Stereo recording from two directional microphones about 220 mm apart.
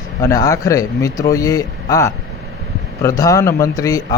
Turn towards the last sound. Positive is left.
turn(degrees=15)  # may be behind; listen again after turning